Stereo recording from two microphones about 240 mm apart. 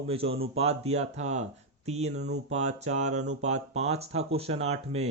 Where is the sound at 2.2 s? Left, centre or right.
Right.